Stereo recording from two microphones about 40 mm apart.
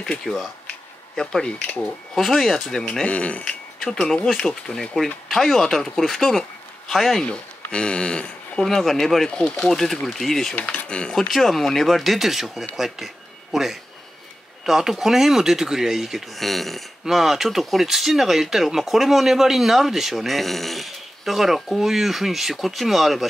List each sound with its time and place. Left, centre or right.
0.2 s a sound: centre
1.8 s speech: centre
2.9 s speech: left
3.4 s a sound: centre
4.1 s speech: centre
7.2 s speech: left
8.5 s speech: centre
10.5 s speech: left
10.9 s speech: left
11.1 s speech: centre
17.1 s speech: centre